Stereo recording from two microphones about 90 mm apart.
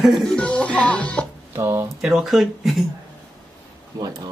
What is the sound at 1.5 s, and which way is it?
Speech, 30° right (ahead or behind).